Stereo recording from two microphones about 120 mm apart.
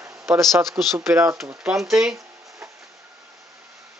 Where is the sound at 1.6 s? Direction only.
5° right (ahead or behind).